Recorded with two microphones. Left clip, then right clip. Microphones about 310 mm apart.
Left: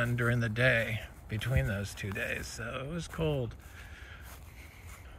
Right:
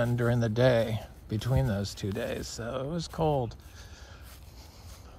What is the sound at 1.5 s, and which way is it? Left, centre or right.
Speech, right.